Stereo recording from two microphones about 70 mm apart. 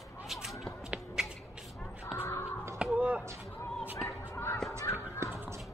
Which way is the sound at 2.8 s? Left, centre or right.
Centre.